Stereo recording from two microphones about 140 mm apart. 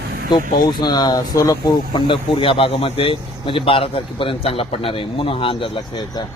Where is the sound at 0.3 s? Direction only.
30° left (ahead or behind).